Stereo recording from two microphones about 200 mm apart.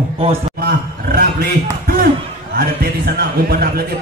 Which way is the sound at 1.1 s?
50° right (ahead or behind).